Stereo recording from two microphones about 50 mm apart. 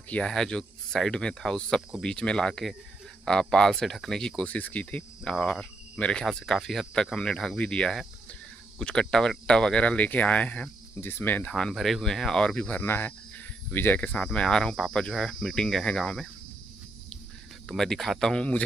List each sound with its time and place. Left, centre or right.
0.3 s speech: centre
4.4 s speech: left
6.2 s speech: centre
9.8 s speech: left
11.0 s cricket: left
11.7 s speech: centre
12.7 s cricket: left
13.9 s speech: left
14.3 s speech: centre
17.6 s speech: centre
18.3 s speech: left